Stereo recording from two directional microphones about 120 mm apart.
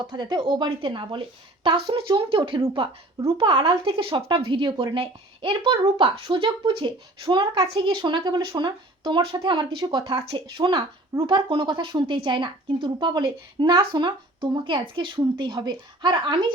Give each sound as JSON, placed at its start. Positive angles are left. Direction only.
{"t": 0.0, "sound": "speech", "side_deg": -40}